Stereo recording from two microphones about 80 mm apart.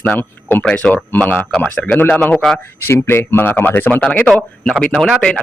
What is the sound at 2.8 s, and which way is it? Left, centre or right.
A man's voice, left.